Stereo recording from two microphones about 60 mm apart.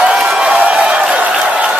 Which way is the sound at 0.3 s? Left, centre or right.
Centre.